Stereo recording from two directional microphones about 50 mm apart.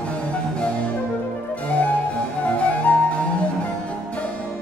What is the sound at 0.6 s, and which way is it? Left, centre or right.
Music, left.